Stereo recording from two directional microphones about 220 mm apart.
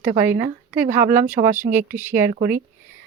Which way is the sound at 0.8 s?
35° right (ahead or behind).